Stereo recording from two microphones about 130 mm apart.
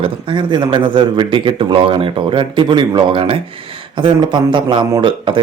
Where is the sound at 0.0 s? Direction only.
40° right (ahead or behind).